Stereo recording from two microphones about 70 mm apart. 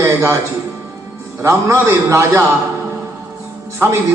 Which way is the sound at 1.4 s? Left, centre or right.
Right.